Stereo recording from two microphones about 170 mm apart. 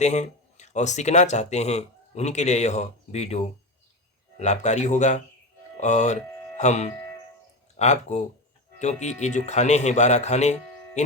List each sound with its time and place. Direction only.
0.0 s speech: 45° left (ahead or behind)